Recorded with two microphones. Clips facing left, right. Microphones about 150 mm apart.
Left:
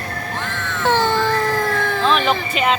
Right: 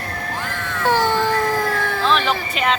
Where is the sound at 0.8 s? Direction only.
10° right (ahead or behind).